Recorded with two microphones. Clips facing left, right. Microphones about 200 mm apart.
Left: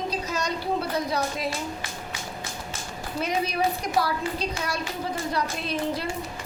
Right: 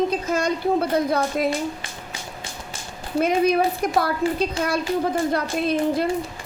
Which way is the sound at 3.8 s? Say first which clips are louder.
Right 5 dB; 55° right (ahead or behind).